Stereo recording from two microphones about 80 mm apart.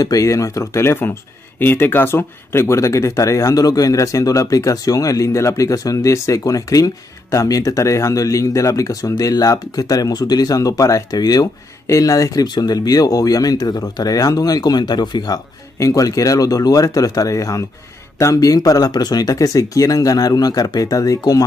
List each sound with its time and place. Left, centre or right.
0.0 s speech: left
15.8 s speech: left